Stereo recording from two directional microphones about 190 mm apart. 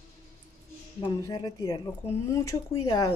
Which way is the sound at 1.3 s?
20° left (ahead or behind).